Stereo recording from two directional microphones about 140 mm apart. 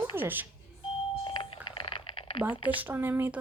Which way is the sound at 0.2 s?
15° right (ahead or behind).